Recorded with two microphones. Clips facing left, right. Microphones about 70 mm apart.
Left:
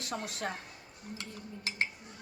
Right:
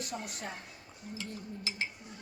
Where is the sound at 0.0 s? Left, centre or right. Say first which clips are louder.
Left 3 dB; left.